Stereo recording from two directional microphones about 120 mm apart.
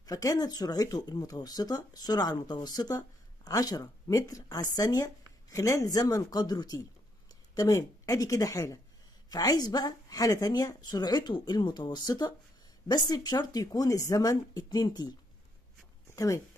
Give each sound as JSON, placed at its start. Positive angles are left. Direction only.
{"t": 0.0, "sound": "speech", "side_deg": 30}